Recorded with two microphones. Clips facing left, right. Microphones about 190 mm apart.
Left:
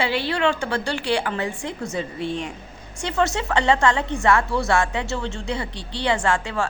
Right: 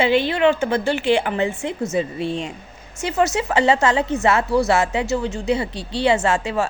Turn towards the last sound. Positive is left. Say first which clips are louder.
# right 3 dB
turn(degrees=-20)  # may be behind; listen again after turning